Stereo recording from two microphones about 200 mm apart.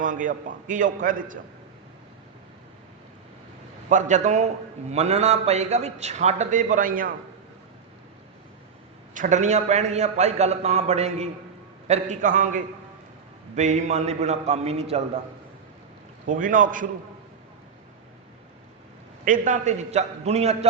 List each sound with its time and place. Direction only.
0.0 s a man's voice: 40° right (ahead or behind)
3.8 s a man's voice: 40° right (ahead or behind)
9.1 s a man's voice: 40° right (ahead or behind)
16.2 s a man's voice: 40° right (ahead or behind)
19.2 s a man's voice: 40° right (ahead or behind)